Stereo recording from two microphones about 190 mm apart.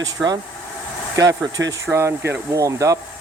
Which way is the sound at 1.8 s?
15° right (ahead or behind).